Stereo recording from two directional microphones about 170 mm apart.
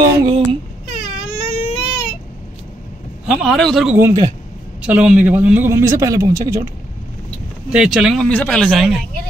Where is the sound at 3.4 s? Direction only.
Centre (ahead or behind); by 6.7 s 15° right (ahead or behind).